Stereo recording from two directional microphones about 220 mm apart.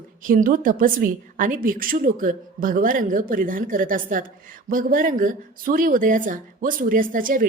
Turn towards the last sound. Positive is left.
turn(degrees=-40)  # may be behind; listen again after turning